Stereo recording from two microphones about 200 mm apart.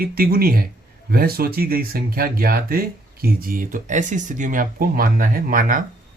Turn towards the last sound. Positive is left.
turn(degrees=-45)  # may be behind; listen again after turning